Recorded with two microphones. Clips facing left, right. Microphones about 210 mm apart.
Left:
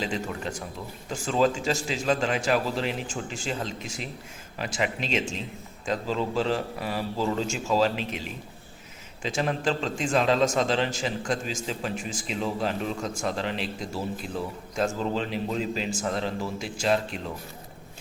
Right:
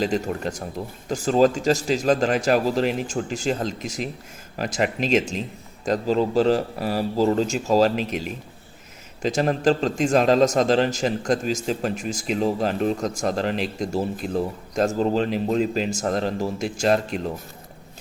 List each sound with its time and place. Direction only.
0.0 s a man's voice: 40° right (ahead or behind)
9.2 s a man's voice: 45° right (ahead or behind)